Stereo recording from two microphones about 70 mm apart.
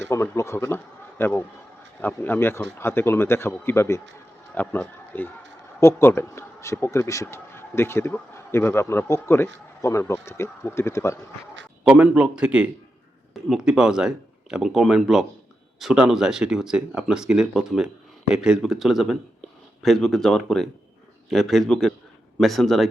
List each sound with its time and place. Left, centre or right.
0.1 s a man's voice: left
4.5 s a man's voice: left
6.2 s a man's voice: left
12.0 s a man's voice: centre